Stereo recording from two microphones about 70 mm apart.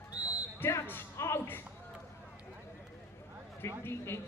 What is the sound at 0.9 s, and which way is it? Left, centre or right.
Music, left.